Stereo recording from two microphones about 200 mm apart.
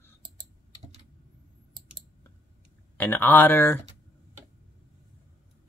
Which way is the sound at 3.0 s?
10° left (ahead or behind).